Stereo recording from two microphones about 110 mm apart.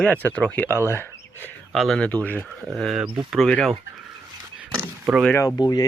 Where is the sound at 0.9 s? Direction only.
20° left (ahead or behind).